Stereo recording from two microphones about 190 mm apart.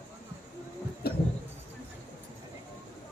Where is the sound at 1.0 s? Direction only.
55° left (ahead or behind).